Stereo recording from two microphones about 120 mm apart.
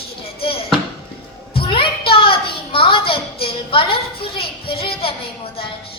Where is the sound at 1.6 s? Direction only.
45° left (ahead or behind).